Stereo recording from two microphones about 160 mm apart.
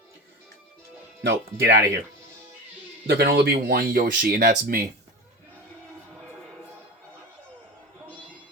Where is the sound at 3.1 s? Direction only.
80° right; by 4.8 s 60° right (ahead or behind).